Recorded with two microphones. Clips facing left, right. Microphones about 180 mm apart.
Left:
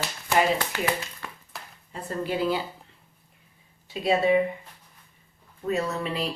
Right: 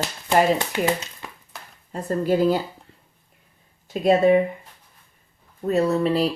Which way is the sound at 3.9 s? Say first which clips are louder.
Right 5 dB; 50° right (ahead or behind).